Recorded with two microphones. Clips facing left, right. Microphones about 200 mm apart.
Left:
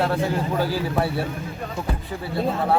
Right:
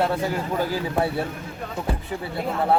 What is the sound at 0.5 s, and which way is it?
Speech, 15° right (ahead or behind).